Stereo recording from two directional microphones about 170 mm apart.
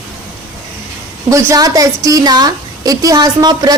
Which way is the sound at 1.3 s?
20° right (ahead or behind).